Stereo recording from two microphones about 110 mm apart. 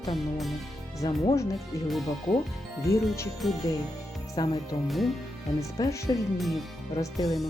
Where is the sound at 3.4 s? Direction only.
Centre (ahead or behind).